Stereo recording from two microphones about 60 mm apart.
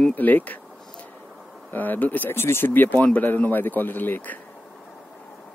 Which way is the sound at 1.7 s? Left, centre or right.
Left.